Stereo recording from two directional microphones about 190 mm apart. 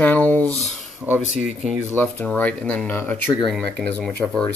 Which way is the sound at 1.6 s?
5° left (ahead or behind).